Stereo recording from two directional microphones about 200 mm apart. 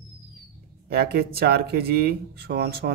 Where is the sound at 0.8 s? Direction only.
50° right (ahead or behind).